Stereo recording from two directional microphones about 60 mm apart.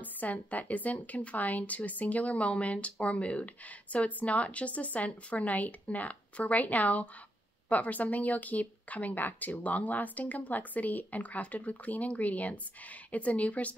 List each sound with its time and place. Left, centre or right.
0.0 s speech: left